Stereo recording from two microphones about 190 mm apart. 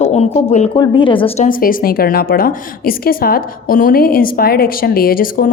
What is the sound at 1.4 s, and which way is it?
A woman's voice, 45° left (ahead or behind).